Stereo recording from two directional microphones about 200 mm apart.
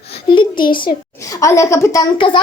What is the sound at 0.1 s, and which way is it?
A child's voice, 25° left (ahead or behind).